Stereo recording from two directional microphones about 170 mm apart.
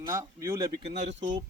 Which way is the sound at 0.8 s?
40° right (ahead or behind).